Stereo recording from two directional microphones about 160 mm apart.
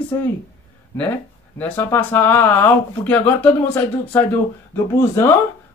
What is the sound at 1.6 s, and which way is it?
Speech, 15° left (ahead or behind).